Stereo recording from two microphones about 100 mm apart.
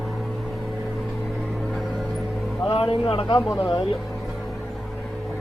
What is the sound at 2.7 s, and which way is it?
Speech, 70° left (ahead or behind).